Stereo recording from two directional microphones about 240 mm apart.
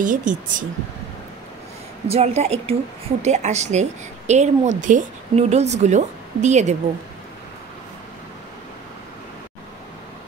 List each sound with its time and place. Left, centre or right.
0.0 s speech: right
2.0 s a woman's voice: right